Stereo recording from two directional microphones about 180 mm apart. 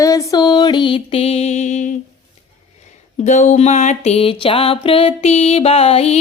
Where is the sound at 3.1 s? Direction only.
40° left (ahead or behind).